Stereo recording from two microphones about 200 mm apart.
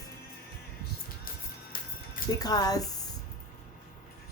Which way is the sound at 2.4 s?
20° left (ahead or behind).